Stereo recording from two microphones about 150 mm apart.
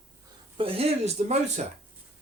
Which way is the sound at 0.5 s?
40° right (ahead or behind).